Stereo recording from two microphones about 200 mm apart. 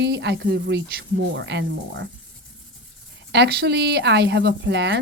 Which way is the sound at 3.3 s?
55° right (ahead or behind).